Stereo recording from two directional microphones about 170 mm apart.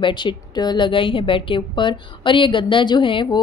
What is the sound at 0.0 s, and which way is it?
A woman's voice, 30° left (ahead or behind).